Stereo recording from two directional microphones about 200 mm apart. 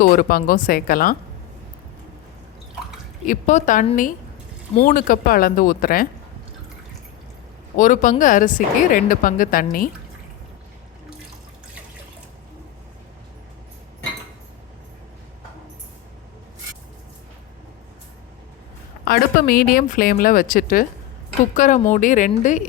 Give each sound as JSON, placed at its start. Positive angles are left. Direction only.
{"t": 0.0, "sound": "speech", "side_deg": 45}
{"t": 3.2, "sound": "a woman's voice", "side_deg": 40}
{"t": 7.8, "sound": "speech", "side_deg": 40}
{"t": 19.0, "sound": "a woman's voice", "side_deg": 45}